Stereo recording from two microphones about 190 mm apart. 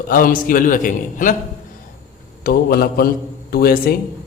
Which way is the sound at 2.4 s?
55° left (ahead or behind).